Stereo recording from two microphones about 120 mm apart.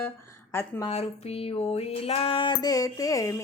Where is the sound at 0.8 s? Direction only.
55° left (ahead or behind).